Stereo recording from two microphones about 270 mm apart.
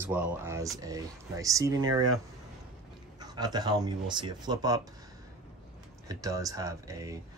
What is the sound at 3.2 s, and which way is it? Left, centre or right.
Speech, centre.